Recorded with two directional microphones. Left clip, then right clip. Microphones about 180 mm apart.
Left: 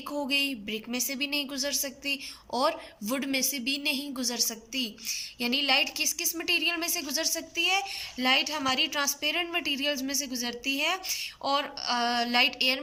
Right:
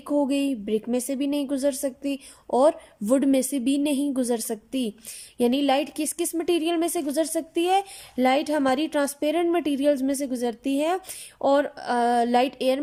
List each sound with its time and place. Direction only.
0.3 s a woman's voice: 40° right (ahead or behind)